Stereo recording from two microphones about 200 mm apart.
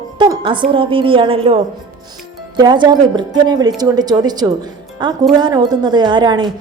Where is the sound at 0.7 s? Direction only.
25° right (ahead or behind).